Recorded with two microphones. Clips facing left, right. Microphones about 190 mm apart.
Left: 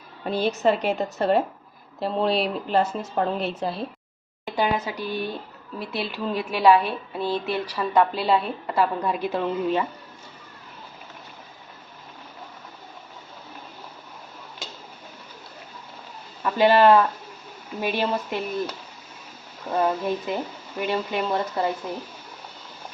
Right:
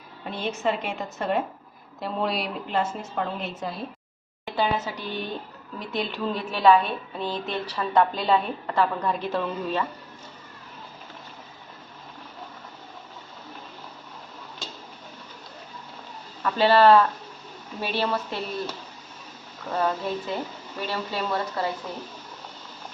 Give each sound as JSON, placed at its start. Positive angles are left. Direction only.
{"t": 0.3, "sound": "a woman's voice", "side_deg": 35}
{"t": 4.4, "sound": "a woman's voice", "side_deg": 15}
{"t": 16.4, "sound": "a woman's voice", "side_deg": 15}
{"t": 19.7, "sound": "a woman's voice", "side_deg": 15}